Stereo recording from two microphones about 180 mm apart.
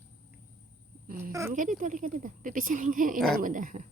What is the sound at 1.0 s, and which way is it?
A child's voice, 50° right (ahead or behind).